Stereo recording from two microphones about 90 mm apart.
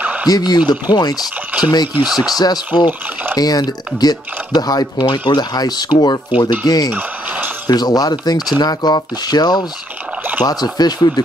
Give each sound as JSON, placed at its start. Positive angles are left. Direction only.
{"t": 0.0, "sound": "a sound", "side_deg": -15}
{"t": 0.3, "sound": "speech", "side_deg": 50}
{"t": 2.0, "sound": "speech", "side_deg": -5}
{"t": 2.3, "sound": "speech", "side_deg": 45}
{"t": 6.9, "sound": "a sound", "side_deg": -20}
{"t": 7.6, "sound": "speech", "side_deg": 50}